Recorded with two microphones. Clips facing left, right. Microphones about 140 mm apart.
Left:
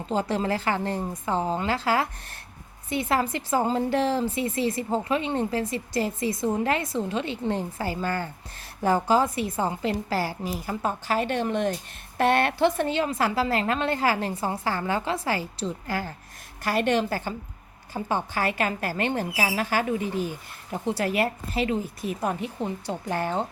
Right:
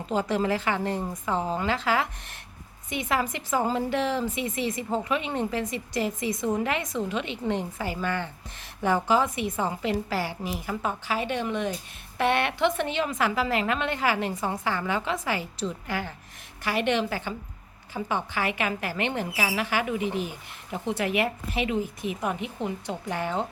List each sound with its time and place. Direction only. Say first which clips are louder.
0.1 s a woman's voice: even; 30° left (ahead or behind)
11.1 s a woman's voice: left 4 dB; 45° left (ahead or behind)